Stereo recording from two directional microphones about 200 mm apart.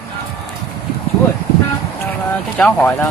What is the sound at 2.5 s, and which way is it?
Speech, 5° left (ahead or behind).